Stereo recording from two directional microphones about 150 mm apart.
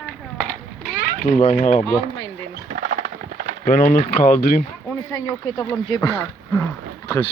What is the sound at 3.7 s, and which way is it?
Speech, 70° left (ahead or behind).